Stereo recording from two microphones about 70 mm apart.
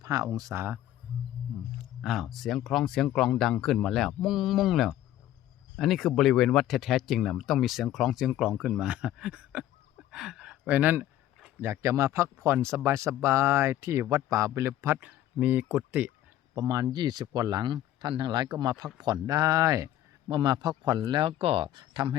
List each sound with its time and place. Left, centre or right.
0.0 s speech: right
0.5 s speech: right
2.0 s speech: centre
8.6 s a sound: centre
10.7 s speech: right
11.6 s a man's voice: right
14.3 s a man's voice: right
15.0 s speech: right
16.6 s speech: right
18.5 s speech: right
20.3 s speech: right